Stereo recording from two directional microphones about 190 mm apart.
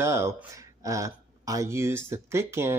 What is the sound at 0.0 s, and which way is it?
Speech, 15° right (ahead or behind).